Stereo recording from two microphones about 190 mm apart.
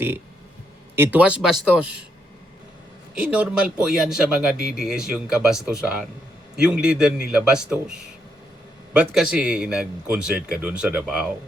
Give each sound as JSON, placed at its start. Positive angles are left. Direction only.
{"t": 0.9, "sound": "speech", "side_deg": -10}
{"t": 3.2, "sound": "speech", "side_deg": -5}